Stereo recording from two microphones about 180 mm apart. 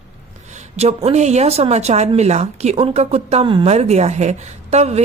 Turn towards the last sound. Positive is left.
turn(degrees=-35)  # may be behind; listen again after turning